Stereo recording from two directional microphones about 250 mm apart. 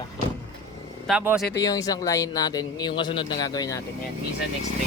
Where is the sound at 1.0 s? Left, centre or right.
Centre.